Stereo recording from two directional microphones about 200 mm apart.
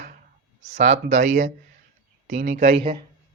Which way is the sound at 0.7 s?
45° right (ahead or behind).